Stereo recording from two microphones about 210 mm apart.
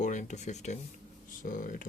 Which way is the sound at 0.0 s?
35° left (ahead or behind).